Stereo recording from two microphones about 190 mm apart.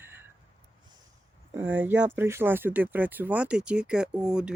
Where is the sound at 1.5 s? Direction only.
10° right (ahead or behind).